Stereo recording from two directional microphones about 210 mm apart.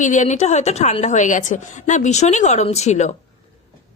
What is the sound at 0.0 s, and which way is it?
Speech, 35° left (ahead or behind).